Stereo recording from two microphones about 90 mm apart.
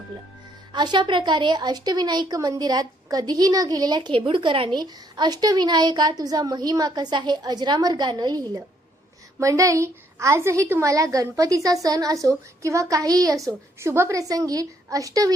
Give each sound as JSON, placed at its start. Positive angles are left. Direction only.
{"t": 0.7, "sound": "a woman's voice", "side_deg": -60}
{"t": 4.1, "sound": "speech", "side_deg": -65}
{"t": 4.8, "sound": "a woman's voice", "side_deg": -50}
{"t": 9.4, "sound": "a woman's voice", "side_deg": -35}